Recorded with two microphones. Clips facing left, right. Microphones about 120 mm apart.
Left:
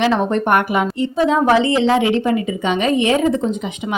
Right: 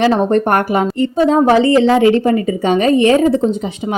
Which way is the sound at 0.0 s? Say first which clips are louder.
Right 4 dB; 40° right (ahead or behind).